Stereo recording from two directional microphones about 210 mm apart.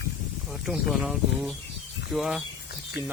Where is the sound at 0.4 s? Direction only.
Centre (ahead or behind).